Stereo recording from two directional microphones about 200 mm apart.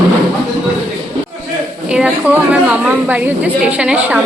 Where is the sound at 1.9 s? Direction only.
5° right (ahead or behind).